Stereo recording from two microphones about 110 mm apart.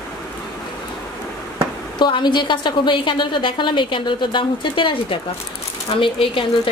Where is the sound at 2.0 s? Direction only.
45° left (ahead or behind).